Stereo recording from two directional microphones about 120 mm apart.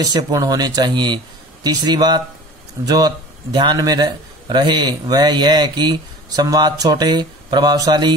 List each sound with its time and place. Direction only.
0.0 s speech: 30° right (ahead or behind)